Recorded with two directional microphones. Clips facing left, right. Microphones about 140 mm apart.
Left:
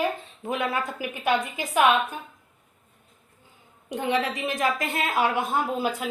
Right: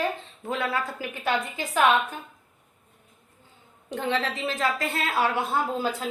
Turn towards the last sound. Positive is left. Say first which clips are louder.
# left 1 dB
turn(degrees=15)  # may be behind; listen again after turning